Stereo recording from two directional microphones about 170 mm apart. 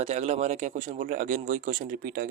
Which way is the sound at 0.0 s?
40° right (ahead or behind).